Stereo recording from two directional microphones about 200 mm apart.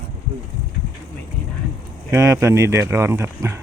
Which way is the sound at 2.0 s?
15° right (ahead or behind).